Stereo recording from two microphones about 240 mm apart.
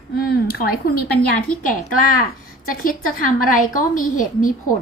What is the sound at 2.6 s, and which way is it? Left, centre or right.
A woman's voice, left.